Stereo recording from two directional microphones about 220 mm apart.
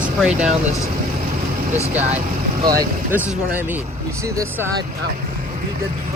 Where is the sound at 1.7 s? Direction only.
30° right (ahead or behind).